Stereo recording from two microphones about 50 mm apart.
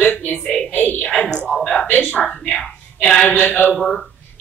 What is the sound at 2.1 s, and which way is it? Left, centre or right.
A woman's voice, left.